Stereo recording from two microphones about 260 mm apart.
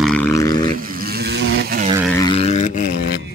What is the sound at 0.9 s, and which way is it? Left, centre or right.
Vehicle, right.